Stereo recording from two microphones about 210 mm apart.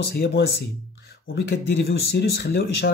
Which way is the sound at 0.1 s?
50° left (ahead or behind).